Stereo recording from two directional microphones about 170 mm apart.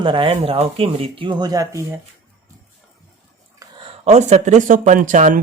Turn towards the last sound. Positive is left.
turn(degrees=-45)  # may be behind; listen again after turning